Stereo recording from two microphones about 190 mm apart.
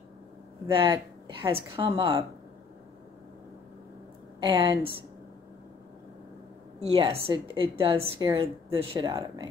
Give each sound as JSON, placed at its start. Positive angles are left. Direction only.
{"t": 0.7, "sound": "speech", "side_deg": -25}
{"t": 4.4, "sound": "speech", "side_deg": -25}
{"t": 6.8, "sound": "speech", "side_deg": -30}